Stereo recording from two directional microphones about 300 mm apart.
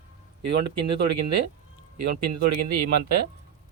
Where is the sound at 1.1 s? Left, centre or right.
Right.